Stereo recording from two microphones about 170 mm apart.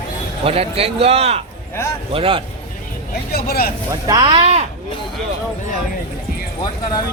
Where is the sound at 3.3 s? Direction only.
65° left (ahead or behind).